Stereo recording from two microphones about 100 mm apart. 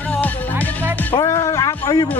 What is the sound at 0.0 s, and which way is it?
Music, 15° left (ahead or behind).